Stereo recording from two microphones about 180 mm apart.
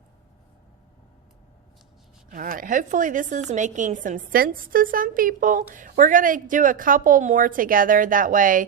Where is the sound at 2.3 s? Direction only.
50° right (ahead or behind).